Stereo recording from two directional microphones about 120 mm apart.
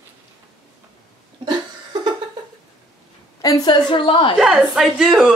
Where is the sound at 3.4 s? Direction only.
30° left (ahead or behind).